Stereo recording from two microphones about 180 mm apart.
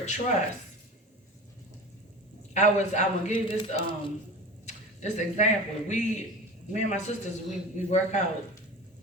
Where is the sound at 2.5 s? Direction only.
40° left (ahead or behind).